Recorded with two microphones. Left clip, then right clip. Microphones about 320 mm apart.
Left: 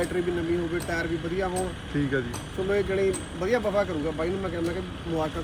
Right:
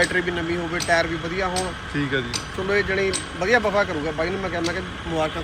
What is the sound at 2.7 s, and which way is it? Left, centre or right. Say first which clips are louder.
Speech: right 4 dB; right.